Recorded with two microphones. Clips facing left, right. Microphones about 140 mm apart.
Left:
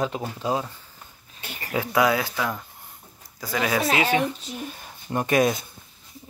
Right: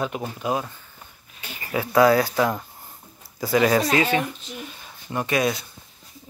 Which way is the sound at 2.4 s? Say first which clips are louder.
Right 6 dB; 15° right (ahead or behind).